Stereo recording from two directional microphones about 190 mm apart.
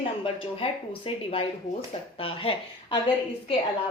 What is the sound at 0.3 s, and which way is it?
A woman's voice, 30° left (ahead or behind).